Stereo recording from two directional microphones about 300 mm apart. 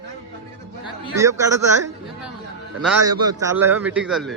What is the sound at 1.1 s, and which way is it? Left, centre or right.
Speech, centre.